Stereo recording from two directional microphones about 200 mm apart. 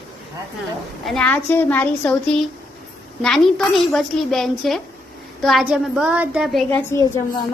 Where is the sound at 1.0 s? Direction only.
5° left (ahead or behind).